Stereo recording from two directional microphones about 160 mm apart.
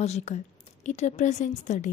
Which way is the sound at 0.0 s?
45° left (ahead or behind).